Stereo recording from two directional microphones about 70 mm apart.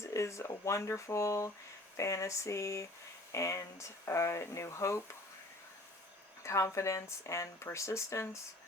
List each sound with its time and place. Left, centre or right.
0.0 s speech: left
6.4 s speech: left